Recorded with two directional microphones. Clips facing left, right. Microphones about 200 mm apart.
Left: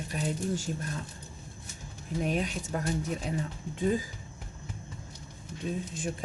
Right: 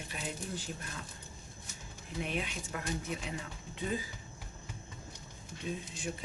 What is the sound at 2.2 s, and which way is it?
Speech, 40° left (ahead or behind).